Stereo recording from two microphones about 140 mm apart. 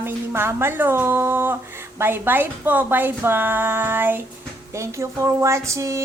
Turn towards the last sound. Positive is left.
turn(degrees=-20)  # may be behind; listen again after turning